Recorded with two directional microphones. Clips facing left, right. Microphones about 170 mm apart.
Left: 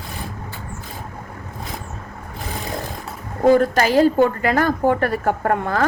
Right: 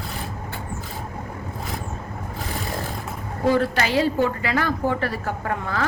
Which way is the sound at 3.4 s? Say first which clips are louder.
Left 6 dB; 45° left (ahead or behind).